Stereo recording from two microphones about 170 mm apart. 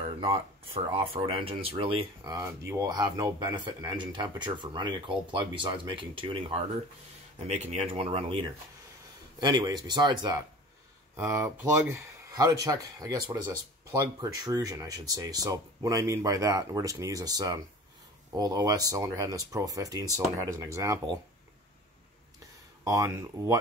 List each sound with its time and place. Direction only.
0.2 s speech: 35° right (ahead or behind)
11.1 s speech: 15° right (ahead or behind)
14.2 s speech: 20° right (ahead or behind)
22.8 s speech: 20° right (ahead or behind)